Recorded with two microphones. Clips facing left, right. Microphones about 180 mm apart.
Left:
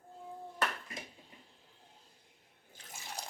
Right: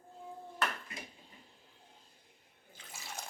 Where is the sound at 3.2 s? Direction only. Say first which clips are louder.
Left 1 dB; 35° left (ahead or behind).